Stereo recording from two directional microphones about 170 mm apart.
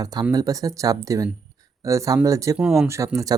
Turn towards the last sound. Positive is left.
turn(degrees=-20)  # may be behind; listen again after turning